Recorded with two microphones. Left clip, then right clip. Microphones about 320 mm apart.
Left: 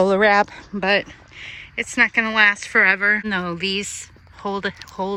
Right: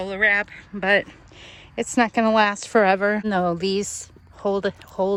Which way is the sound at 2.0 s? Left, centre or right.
Centre.